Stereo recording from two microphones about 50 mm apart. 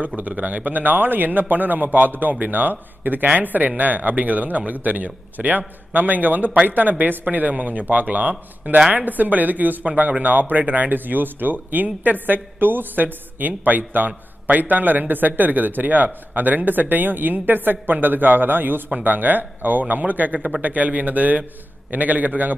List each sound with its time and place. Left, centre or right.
0.0 s speech: right